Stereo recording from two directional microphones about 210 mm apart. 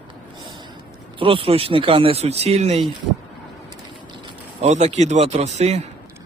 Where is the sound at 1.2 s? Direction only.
25° right (ahead or behind).